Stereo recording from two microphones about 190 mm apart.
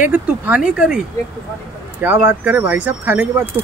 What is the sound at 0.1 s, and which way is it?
Speech, 5° right (ahead or behind).